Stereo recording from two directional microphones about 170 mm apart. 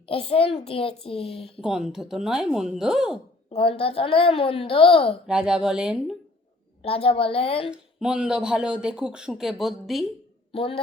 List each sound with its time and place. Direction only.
0.0 s a child's voice: 35° left (ahead or behind)
1.6 s speech: 5° right (ahead or behind)
3.5 s a child's voice: 35° left (ahead or behind)
5.2 s speech: 5° right (ahead or behind)
6.8 s a child's voice: 35° left (ahead or behind)
7.7 s speech: 5° right (ahead or behind)
10.5 s a woman's voice: 35° left (ahead or behind)